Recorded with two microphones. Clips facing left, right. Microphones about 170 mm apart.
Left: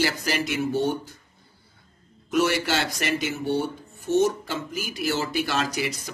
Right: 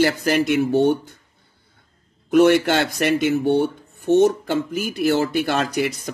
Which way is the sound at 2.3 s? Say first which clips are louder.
Right 9 dB; 55° right (ahead or behind).